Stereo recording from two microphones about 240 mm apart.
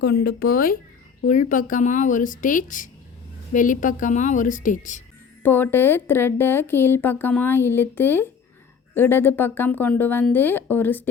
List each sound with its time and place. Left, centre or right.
0.0 s speech: left
5.4 s speech: centre